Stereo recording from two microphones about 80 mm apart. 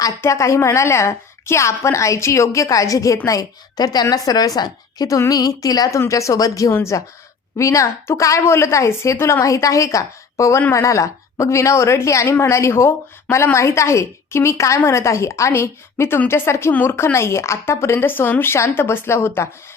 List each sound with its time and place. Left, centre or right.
0.2 s a woman's voice: left
3.8 s a woman's voice: left